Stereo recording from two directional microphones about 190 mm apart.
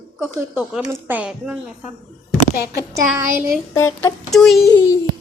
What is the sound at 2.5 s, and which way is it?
Speech, 55° left (ahead or behind).